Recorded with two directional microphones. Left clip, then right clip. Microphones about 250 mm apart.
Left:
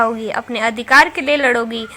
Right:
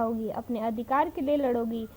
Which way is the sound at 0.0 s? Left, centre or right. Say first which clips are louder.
Left 13 dB; left.